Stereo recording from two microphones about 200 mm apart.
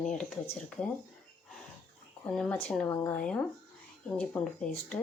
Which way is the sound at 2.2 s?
5° left (ahead or behind).